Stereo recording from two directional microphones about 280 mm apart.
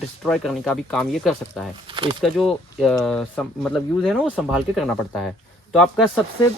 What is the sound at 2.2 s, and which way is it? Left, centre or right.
Speech, centre.